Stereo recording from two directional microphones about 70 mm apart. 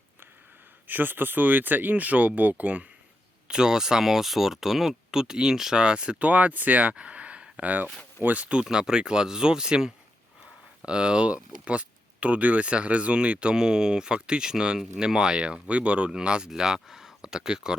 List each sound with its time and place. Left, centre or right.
0.9 s speech: right
3.5 s speech: centre